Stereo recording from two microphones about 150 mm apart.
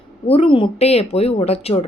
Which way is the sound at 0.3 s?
40° left (ahead or behind).